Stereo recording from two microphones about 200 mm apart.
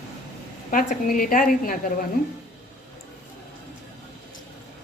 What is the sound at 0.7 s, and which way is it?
Speech, 40° left (ahead or behind).